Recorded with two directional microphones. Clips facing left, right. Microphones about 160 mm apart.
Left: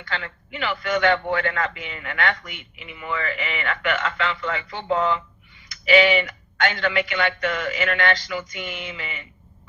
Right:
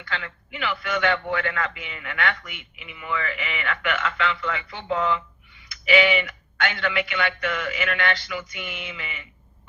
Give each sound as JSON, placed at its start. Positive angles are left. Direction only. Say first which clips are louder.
{"t": 0.0, "sound": "a man's voice", "louder": "left 2 dB", "side_deg": 35}